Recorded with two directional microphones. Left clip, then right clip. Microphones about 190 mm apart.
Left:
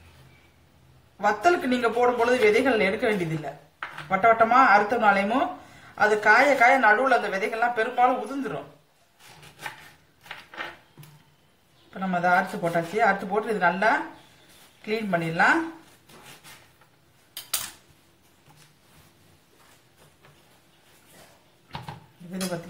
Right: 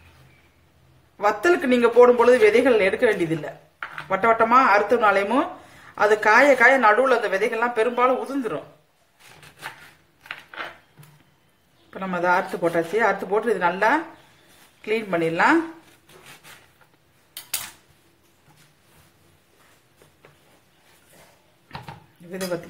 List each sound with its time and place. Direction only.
1.2 s a woman's voice: 55° right (ahead or behind)
4.1 s a woman's voice: 55° right (ahead or behind)
12.0 s a woman's voice: 55° right (ahead or behind)
14.9 s a woman's voice: 55° right (ahead or behind)